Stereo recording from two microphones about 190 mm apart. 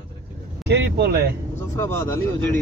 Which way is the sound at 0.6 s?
60° right (ahead or behind).